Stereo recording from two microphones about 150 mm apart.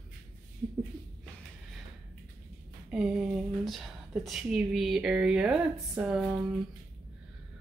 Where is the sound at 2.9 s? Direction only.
Centre (ahead or behind).